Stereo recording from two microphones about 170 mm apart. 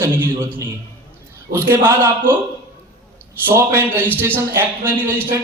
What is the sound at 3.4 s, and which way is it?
A man's voice, 15° right (ahead or behind).